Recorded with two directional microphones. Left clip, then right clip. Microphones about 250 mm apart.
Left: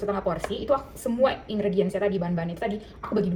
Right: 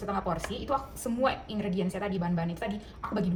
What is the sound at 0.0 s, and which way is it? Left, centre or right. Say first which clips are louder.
Speech: left 5 dB; right.